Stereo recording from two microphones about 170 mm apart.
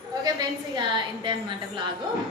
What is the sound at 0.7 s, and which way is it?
Speech, 30° right (ahead or behind).